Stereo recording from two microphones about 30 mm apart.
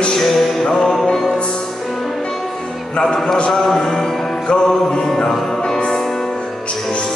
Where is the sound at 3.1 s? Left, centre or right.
Centre.